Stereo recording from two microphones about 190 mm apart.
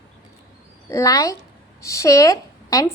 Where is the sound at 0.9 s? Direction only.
15° left (ahead or behind).